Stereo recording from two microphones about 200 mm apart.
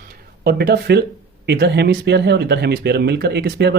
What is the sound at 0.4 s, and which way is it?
Speech, 55° right (ahead or behind).